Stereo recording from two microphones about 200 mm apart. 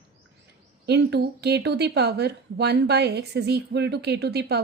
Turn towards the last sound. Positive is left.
turn(degrees=-55)  # may be behind; listen again after turning